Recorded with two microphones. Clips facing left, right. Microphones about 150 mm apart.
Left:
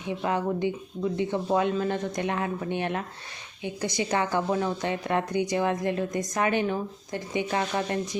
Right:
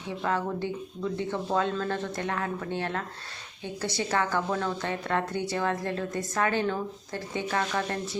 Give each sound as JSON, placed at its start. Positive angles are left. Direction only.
{"t": 0.1, "sound": "a woman's voice", "side_deg": 15}